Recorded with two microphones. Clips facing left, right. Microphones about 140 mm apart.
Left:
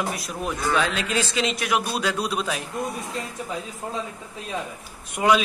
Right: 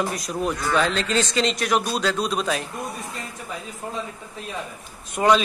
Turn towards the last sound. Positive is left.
turn(degrees=5)  # may be behind; listen again after turning